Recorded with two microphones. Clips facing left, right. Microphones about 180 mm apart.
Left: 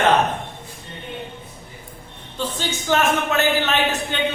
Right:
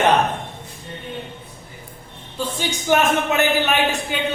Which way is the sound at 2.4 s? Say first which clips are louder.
Right 1 dB; 15° right (ahead or behind).